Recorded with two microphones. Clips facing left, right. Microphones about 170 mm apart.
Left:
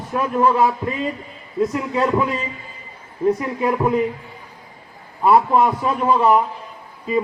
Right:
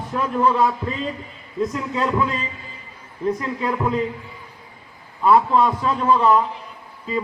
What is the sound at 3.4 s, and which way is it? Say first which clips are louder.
Speech: left 4 dB; 15° left (ahead or behind).